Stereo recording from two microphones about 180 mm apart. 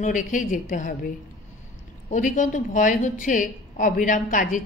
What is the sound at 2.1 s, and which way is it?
A woman's voice, 45° left (ahead or behind).